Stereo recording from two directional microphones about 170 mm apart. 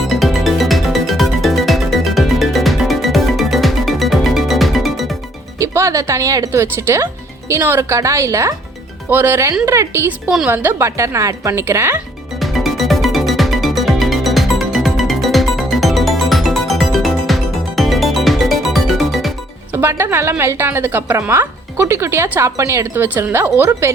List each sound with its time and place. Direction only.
0.1 s music: centre (ahead or behind)
5.5 s a woman's voice: 15° right (ahead or behind)
10.2 s a woman's voice: 5° right (ahead or behind)
12.4 s music: centre (ahead or behind)
19.7 s a woman's voice: 15° right (ahead or behind)